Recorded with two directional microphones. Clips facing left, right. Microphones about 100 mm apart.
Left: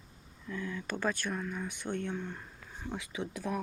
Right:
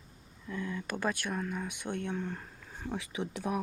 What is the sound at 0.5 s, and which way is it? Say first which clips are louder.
Speech: right 1 dB; 25° right (ahead or behind).